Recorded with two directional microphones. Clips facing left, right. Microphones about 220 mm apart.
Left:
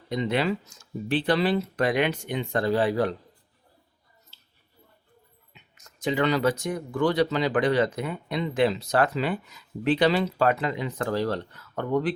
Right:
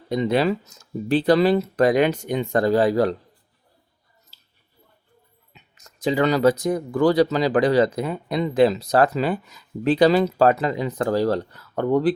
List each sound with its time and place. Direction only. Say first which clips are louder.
0.1 s speech: right 5 dB; 40° right (ahead or behind)
4.3 s a sound: even; 35° right (ahead or behind)
5.5 s speech: right 3 dB; 35° right (ahead or behind)